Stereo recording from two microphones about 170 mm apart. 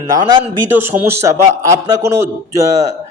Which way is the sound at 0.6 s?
10° right (ahead or behind).